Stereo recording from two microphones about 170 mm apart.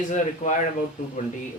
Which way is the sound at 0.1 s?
45° left (ahead or behind).